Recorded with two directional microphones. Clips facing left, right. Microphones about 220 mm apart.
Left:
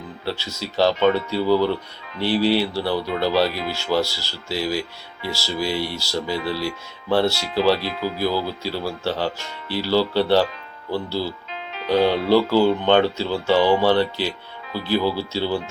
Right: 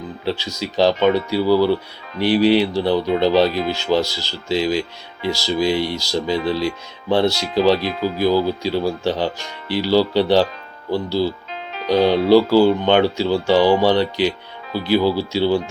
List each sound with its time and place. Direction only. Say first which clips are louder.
0.3 s speech: right 4 dB; 15° right (ahead or behind)
11.5 s music: right 3 dB; 40° right (ahead or behind)
12.3 s speech: right 5 dB; 10° right (ahead or behind)